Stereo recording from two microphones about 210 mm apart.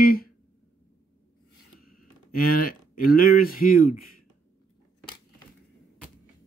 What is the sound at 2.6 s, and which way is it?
Speech, 45° left (ahead or behind).